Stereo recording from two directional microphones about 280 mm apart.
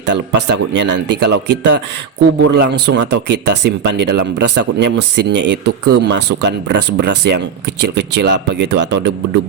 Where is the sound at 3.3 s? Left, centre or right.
Right.